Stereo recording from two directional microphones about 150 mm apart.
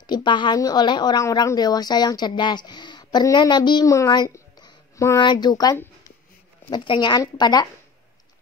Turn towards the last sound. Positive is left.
turn(degrees=25)  # may be behind; listen again after turning